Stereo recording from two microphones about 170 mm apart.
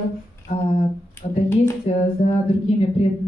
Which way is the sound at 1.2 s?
45° left (ahead or behind).